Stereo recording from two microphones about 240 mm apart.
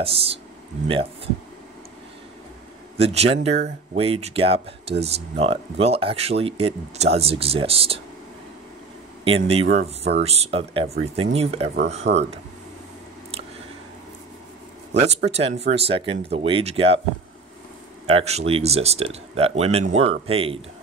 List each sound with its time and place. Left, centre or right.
0.8 s speech: right
3.0 s speech: right
9.2 s speech: right
12.1 s speech: right
15.3 s speech: right
18.0 s speech: right